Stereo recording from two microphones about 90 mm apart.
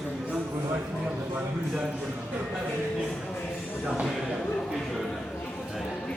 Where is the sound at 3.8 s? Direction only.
10° right (ahead or behind).